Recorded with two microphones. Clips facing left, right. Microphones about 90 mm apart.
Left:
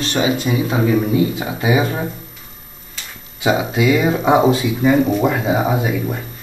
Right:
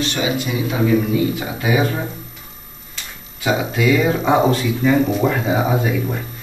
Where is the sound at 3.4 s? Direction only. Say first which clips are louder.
Left 2 dB; 15° left (ahead or behind).